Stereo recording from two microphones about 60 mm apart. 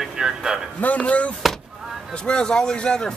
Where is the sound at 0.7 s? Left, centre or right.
Left.